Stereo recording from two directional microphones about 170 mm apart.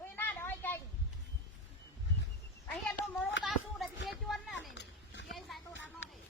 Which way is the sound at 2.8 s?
5° left (ahead or behind).